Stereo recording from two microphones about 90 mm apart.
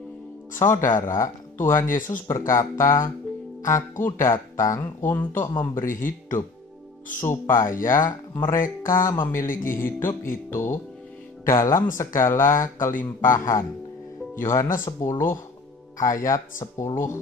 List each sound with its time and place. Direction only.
0.6 s speech: 30° left (ahead or behind)